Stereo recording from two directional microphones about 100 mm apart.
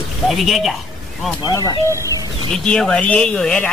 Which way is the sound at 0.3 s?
Centre (ahead or behind).